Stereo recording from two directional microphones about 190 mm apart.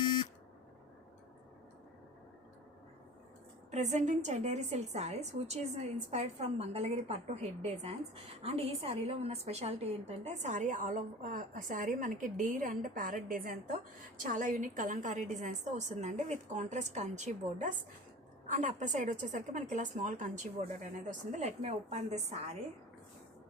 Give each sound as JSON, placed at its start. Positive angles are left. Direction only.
{"t": 3.7, "sound": "a woman's voice", "side_deg": -35}